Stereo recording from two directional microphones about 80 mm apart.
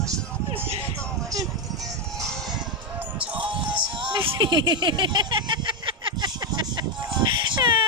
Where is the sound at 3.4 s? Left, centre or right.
Right.